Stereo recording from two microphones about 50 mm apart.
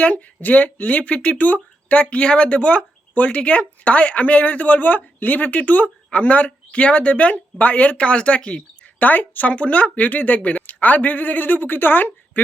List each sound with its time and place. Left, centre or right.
0.0 s speech: left
9.0 s speech: left